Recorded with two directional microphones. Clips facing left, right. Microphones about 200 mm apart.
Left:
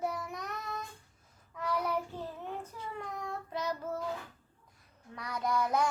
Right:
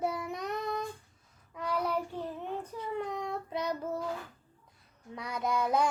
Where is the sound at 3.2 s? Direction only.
20° right (ahead or behind).